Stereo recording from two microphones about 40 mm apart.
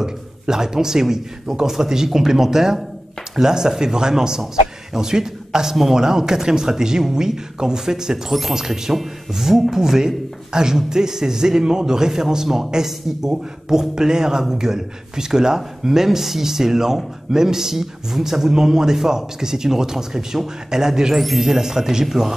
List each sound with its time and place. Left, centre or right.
0.0 s speech: centre